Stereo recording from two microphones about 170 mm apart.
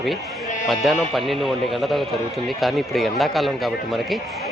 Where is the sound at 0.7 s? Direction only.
Centre (ahead or behind).